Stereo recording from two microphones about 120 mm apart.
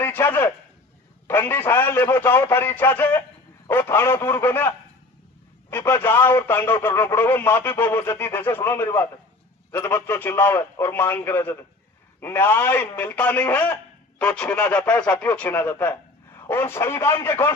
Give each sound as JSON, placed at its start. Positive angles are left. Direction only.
{"t": 0.0, "sound": "a man's voice", "side_deg": 20}
{"t": 5.7, "sound": "a man's voice", "side_deg": 20}